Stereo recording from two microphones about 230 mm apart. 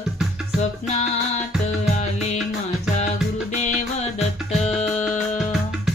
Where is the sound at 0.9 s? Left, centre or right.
Left.